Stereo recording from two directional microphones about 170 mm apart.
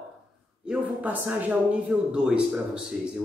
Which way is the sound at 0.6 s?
5° right (ahead or behind).